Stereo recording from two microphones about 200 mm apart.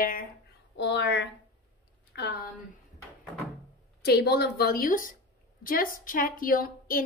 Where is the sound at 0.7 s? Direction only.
60° left (ahead or behind).